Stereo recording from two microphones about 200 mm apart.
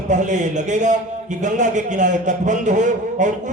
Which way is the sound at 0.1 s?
35° right (ahead or behind).